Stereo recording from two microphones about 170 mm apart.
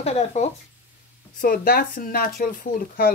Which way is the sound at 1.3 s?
60° left (ahead or behind).